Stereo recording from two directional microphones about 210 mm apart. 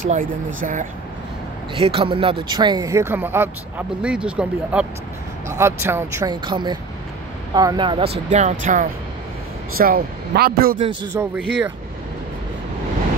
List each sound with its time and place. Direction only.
0.0 s speech: 35° right (ahead or behind)
1.8 s speech: 25° right (ahead or behind)
9.8 s speech: 45° right (ahead or behind)
11.1 s speech: 10° right (ahead or behind)